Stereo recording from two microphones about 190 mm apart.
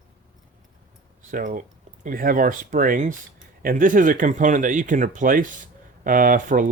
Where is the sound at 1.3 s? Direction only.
45° right (ahead or behind).